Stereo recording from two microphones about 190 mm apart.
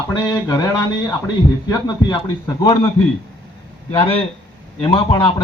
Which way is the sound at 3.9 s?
30° left (ahead or behind).